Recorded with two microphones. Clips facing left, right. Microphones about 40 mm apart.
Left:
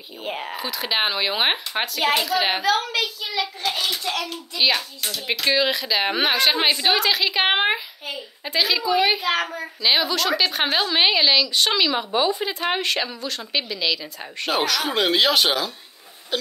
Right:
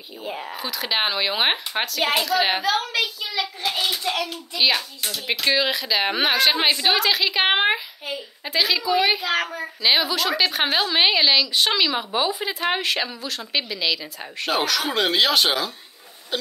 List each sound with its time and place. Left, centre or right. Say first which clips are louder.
0.2 s speech: left 2 dB; left
0.6 s a child's voice: even; centre